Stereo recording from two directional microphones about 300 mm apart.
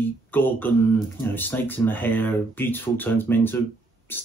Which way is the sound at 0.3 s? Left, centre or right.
Centre.